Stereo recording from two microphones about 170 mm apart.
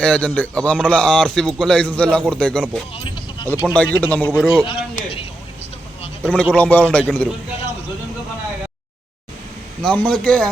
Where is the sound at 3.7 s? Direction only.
10° left (ahead or behind).